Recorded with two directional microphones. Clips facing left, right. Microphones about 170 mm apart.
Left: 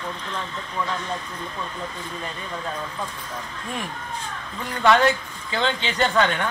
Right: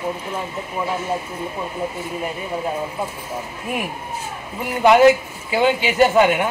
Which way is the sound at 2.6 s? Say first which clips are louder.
Right 6 dB; 20° right (ahead or behind).